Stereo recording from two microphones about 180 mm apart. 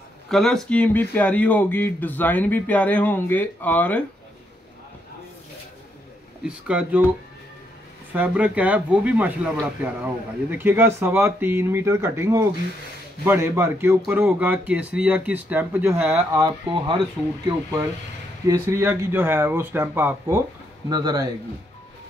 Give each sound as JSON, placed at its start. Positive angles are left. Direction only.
{"t": 0.3, "sound": "speech", "side_deg": 0}
{"t": 6.4, "sound": "speech", "side_deg": -5}
{"t": 8.1, "sound": "speech", "side_deg": -10}
{"t": 18.5, "sound": "a man's voice", "side_deg": -15}